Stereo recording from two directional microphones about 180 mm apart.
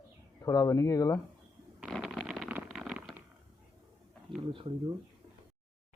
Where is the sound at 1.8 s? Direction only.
Centre (ahead or behind).